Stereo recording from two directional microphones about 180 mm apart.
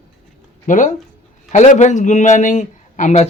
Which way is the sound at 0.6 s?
45° left (ahead or behind).